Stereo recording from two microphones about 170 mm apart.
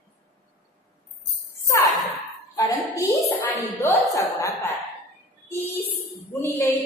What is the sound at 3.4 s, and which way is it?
Music, 10° left (ahead or behind).